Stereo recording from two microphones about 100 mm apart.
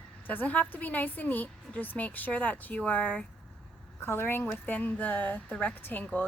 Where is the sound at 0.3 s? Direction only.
15° left (ahead or behind).